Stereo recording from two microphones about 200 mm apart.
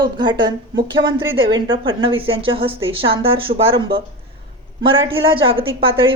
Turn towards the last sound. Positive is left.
turn(degrees=-25)  # may be behind; listen again after turning